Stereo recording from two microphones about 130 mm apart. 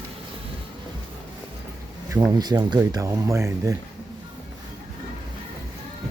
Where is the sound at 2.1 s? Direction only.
30° right (ahead or behind).